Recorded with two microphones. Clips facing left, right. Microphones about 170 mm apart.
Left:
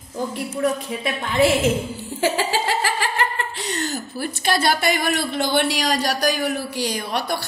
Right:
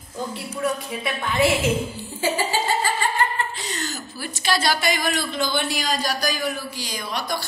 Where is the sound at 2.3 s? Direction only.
90° left.